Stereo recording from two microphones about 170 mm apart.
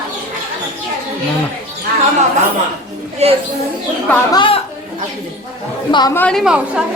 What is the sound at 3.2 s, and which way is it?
Speech, 40° right (ahead or behind).